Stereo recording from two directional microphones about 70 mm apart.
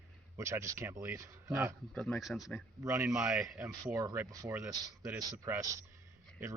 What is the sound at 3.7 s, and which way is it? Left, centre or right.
Speech, right.